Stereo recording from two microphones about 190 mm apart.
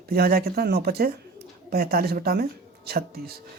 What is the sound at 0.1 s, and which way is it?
Speech, 55° right (ahead or behind).